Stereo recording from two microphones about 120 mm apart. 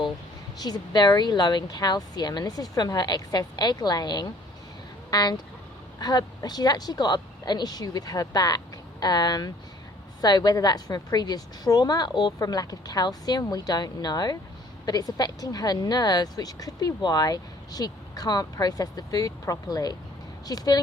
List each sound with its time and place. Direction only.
0.6 s speech: 35° left (ahead or behind)